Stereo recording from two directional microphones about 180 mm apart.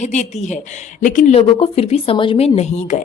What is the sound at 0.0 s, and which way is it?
Speech, 40° left (ahead or behind).